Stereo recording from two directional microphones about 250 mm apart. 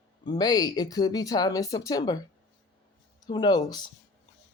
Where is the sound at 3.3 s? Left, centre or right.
Centre.